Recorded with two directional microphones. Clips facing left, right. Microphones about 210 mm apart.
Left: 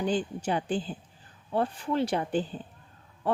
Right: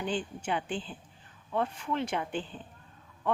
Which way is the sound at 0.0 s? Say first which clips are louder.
Left 5 dB; 40° left (ahead or behind).